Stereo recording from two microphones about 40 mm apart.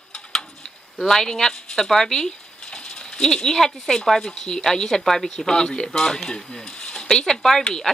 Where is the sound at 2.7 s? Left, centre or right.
Left.